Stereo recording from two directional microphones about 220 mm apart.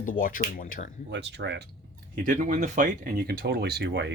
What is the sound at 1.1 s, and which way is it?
Speech, 50° right (ahead or behind).